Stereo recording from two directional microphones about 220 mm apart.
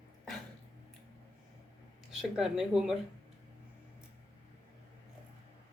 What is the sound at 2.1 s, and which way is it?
Speech, centre (ahead or behind).